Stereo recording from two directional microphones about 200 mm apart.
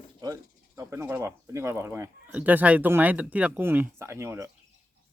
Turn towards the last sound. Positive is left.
turn(degrees=-15)  # may be behind; listen again after turning